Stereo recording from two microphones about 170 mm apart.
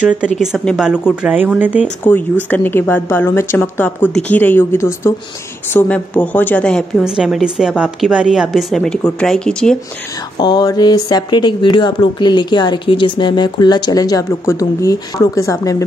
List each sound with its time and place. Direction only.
0.4 s a woman's voice: 5° right (ahead or behind)
2.5 s a woman's voice: 10° left (ahead or behind)
10.3 s speech: 25° left (ahead or behind)